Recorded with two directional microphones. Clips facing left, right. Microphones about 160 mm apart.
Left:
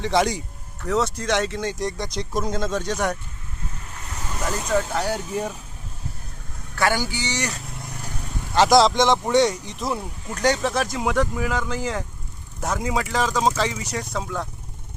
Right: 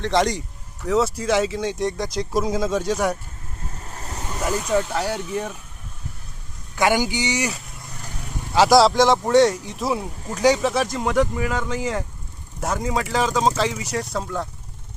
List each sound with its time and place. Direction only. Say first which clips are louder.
0.0 s speech: right 1 dB; 5° left (ahead or behind)
3.8 s waves: right 3 dB; 35° right (ahead or behind)
4.4 s speech: right 2 dB; 5° right (ahead or behind)
6.7 s speech: right 3 dB; 15° right (ahead or behind); by 14.4 s centre (ahead or behind)